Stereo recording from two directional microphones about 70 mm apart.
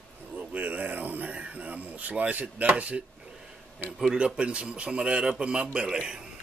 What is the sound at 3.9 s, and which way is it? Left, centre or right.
Speech, centre.